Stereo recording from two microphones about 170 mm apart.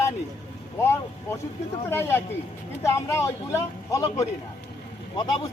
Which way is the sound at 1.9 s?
15° left (ahead or behind).